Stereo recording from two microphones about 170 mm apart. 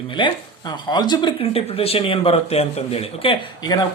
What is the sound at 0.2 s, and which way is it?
Speech, 30° left (ahead or behind).